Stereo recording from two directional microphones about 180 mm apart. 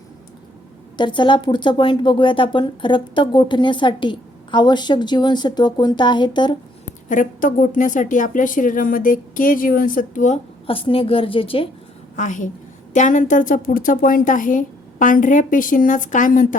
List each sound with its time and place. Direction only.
0.9 s speech: 25° left (ahead or behind)
7.1 s speech: 45° left (ahead or behind); by 11.7 s 30° left (ahead or behind)
12.1 s speech: 45° left (ahead or behind)